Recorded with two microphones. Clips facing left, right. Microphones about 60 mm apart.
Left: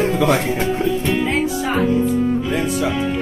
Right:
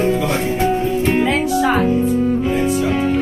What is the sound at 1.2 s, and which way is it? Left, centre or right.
Music, right.